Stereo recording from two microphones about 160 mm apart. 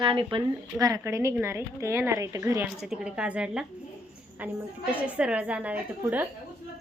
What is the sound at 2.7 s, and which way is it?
A woman's voice, 5° right (ahead or behind).